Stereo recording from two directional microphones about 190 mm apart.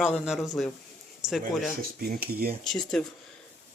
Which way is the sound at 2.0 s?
55° right (ahead or behind).